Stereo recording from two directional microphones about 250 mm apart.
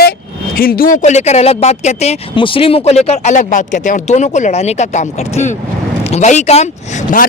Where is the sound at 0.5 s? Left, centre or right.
Left.